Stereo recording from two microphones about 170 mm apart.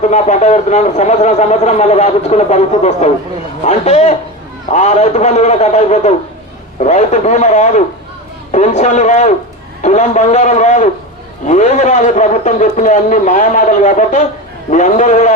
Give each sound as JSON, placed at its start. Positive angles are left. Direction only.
{"t": 0.0, "sound": "a man's voice", "side_deg": 45}